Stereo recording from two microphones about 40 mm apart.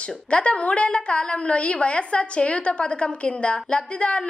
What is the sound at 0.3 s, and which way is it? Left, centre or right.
A woman's voice, left.